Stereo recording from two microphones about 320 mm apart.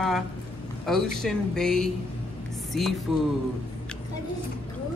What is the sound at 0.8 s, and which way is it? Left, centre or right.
Speech, centre.